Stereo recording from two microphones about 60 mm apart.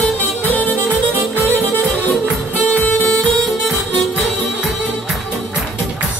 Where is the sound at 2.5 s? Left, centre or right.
Left.